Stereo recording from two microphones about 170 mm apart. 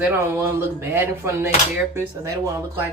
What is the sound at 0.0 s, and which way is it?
Speech, 15° right (ahead or behind).